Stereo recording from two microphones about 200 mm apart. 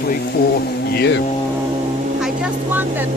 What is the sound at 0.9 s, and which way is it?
Speech, 60° left (ahead or behind).